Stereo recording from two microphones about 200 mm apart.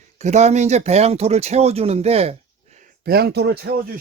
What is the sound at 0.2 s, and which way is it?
Speech, 35° right (ahead or behind).